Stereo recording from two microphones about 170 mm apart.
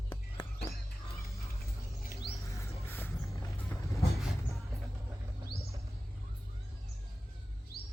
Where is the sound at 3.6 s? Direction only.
20° left (ahead or behind).